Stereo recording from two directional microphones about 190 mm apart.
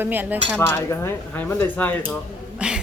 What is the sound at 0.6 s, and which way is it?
Speech, 15° left (ahead or behind).